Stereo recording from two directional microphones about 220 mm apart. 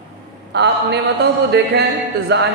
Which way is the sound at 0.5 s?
50° right (ahead or behind).